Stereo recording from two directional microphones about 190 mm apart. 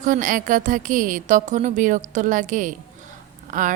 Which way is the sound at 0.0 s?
45° right (ahead or behind).